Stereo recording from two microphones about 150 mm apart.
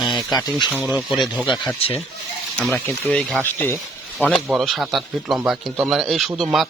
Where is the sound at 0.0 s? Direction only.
Centre (ahead or behind).